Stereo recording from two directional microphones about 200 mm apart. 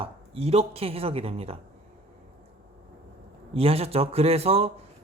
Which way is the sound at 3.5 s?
30° right (ahead or behind).